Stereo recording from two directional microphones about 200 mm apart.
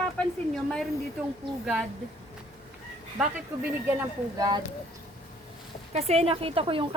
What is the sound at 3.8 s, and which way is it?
Speech, 15° right (ahead or behind).